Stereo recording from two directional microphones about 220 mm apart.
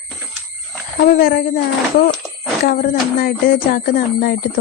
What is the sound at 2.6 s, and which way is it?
Speech, 40° left (ahead or behind).